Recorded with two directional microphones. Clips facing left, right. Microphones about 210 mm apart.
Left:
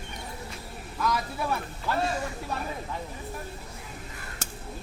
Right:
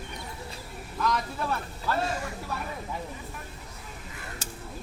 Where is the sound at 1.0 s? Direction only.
5° left (ahead or behind).